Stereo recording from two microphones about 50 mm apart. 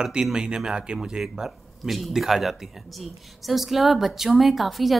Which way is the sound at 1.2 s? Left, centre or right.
Centre.